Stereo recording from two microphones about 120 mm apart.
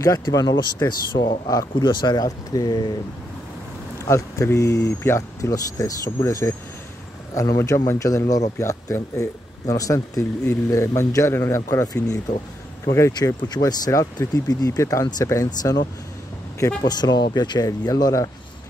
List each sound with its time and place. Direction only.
0.0 s speech: 30° left (ahead or behind)
4.0 s a man's voice: 25° left (ahead or behind)
17.0 s speech: 35° left (ahead or behind)